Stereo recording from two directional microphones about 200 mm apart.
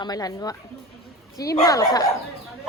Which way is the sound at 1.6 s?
20° left (ahead or behind).